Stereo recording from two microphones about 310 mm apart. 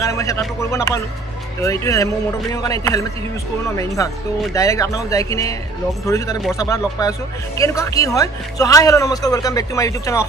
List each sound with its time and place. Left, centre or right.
0.0 s speech: centre